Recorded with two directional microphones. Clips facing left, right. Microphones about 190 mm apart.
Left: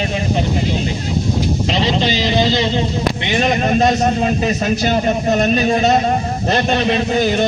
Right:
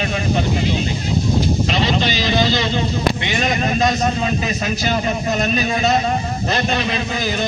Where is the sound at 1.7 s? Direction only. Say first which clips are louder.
Left 2 dB; 25° left (ahead or behind).